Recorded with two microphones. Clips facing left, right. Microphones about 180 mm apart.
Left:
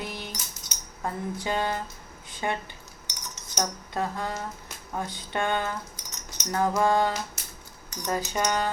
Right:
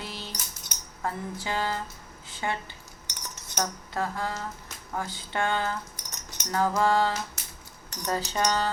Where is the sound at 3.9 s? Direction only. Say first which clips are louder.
Left 1 dB; 20° left (ahead or behind).